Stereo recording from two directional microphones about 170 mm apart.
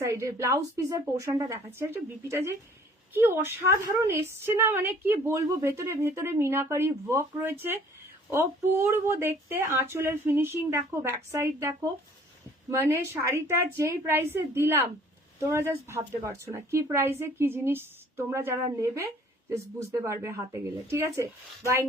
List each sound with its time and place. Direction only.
0.0 s a woman's voice: 15° right (ahead or behind)
12.7 s a woman's voice: 15° right (ahead or behind)